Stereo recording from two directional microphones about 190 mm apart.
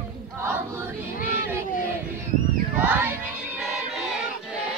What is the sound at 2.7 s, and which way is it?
Crowd, 5° right (ahead or behind).